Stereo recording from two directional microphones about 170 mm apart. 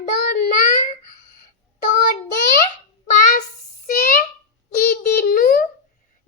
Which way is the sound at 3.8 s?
50° left (ahead or behind).